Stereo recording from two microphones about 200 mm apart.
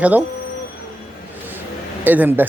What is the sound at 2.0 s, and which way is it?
Speech, 10° right (ahead or behind).